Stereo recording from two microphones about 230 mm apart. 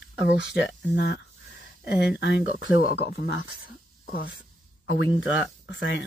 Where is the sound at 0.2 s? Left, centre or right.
Left.